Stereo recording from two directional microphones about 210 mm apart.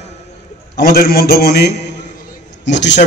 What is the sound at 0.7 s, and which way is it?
A man's voice, 50° left (ahead or behind).